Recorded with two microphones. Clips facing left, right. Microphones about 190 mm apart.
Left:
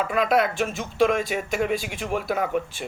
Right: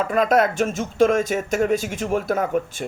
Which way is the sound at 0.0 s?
45° right (ahead or behind).